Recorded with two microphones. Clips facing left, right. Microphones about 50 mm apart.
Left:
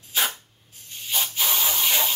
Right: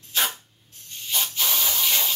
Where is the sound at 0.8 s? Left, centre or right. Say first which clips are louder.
Even; centre.